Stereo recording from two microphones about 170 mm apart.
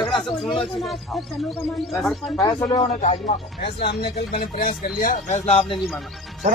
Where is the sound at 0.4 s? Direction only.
Centre (ahead or behind).